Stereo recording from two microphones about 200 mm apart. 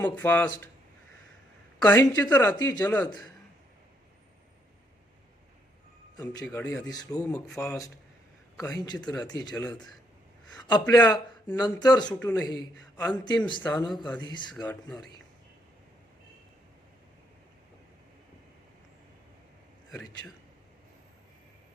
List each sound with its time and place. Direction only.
0.0 s speech: 10° left (ahead or behind)
1.8 s speech: 15° left (ahead or behind)
6.1 s a man's voice: 20° left (ahead or behind)
6.4 s a man's voice: 5° left (ahead or behind)